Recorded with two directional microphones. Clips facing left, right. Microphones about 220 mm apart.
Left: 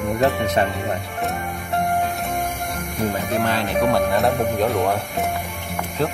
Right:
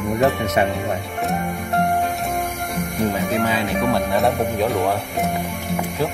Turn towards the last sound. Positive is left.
turn(degrees=0)  # may be behind; listen again after turning